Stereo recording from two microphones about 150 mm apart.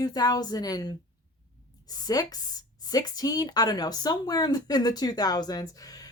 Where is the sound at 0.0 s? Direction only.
25° left (ahead or behind).